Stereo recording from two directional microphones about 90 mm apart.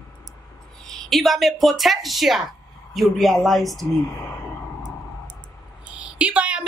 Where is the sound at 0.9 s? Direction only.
5° left (ahead or behind).